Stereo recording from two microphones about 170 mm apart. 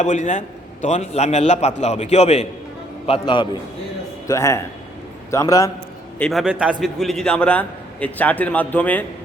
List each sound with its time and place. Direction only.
0.0 s a man's voice: 45° left (ahead or behind); by 3.4 s 30° left (ahead or behind)
4.3 s a man's voice: 15° left (ahead or behind)
6.1 s a man's voice: centre (ahead or behind)